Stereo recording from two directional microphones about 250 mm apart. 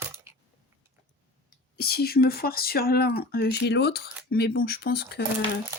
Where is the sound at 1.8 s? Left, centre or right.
Left.